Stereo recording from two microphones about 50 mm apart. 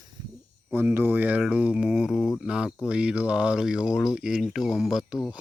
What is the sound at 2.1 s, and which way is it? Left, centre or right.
Speech, centre.